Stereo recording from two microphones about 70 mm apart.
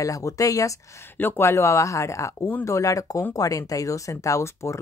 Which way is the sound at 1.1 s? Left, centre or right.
Left.